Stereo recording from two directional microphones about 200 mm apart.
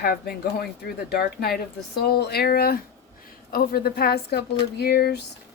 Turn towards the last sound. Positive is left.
turn(degrees=50)  # may be behind; listen again after turning